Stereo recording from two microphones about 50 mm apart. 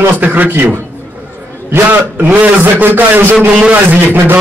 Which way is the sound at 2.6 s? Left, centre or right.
Right.